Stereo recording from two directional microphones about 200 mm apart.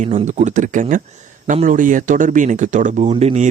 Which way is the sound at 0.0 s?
35° right (ahead or behind).